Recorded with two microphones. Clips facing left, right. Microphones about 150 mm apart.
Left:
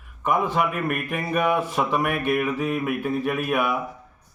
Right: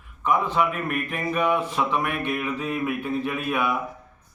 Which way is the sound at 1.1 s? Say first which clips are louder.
Even; 5° left (ahead or behind).